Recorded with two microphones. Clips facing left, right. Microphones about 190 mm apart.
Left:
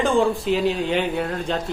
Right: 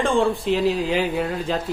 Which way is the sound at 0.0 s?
Centre (ahead or behind).